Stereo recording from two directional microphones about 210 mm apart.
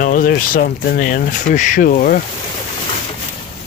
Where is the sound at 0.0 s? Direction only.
40° left (ahead or behind).